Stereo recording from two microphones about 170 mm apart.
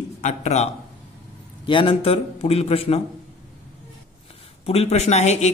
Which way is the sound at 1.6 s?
30° left (ahead or behind).